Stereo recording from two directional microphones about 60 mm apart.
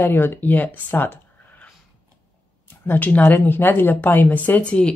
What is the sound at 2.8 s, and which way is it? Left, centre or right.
Speech, left.